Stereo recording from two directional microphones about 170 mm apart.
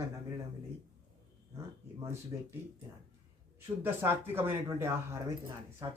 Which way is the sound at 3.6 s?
15° right (ahead or behind).